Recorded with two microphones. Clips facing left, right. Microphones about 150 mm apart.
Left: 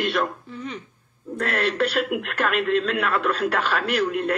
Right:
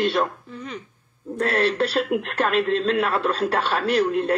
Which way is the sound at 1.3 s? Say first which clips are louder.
Right 2 dB; 30° right (ahead or behind).